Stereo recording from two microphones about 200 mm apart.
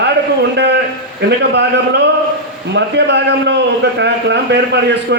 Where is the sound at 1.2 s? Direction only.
55° right (ahead or behind).